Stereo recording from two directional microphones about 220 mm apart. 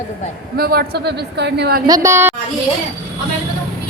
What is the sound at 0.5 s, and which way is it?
A woman's voice, 45° right (ahead or behind).